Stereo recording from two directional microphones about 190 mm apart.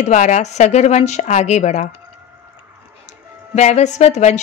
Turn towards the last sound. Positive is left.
turn(degrees=35)  # may be behind; listen again after turning